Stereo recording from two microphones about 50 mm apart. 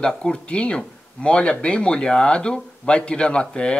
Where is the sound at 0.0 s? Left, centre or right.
Centre.